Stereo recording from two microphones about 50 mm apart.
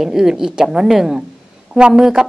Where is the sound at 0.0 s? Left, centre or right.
Centre.